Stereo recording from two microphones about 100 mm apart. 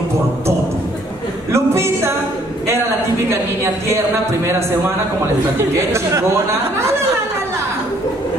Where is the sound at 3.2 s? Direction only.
30° right (ahead or behind).